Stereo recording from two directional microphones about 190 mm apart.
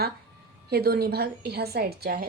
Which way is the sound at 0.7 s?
55° right (ahead or behind).